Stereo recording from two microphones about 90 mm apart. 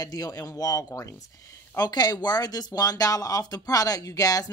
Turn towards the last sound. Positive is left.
turn(degrees=40)  # may be behind; listen again after turning